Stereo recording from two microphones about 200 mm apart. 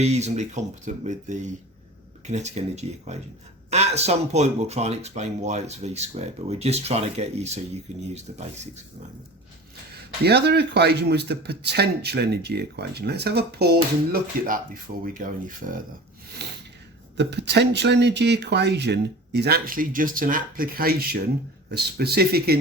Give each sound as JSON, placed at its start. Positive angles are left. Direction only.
{"t": 0.0, "sound": "speech", "side_deg": -35}
{"t": 10.2, "sound": "speech", "side_deg": -55}
{"t": 14.1, "sound": "speech", "side_deg": -45}
{"t": 16.4, "sound": "speech", "side_deg": -55}